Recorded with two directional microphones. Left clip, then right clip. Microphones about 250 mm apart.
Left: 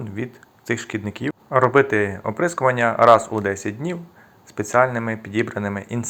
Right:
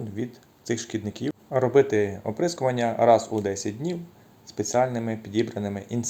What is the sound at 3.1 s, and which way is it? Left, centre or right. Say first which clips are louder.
Speech: left 5 dB; left.